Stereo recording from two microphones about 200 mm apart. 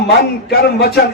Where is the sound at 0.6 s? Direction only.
50° left (ahead or behind).